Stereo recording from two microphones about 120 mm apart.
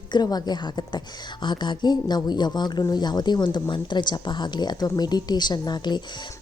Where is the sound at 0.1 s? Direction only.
35° left (ahead or behind).